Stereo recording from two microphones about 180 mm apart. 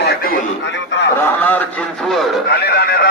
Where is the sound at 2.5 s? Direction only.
65° left (ahead or behind).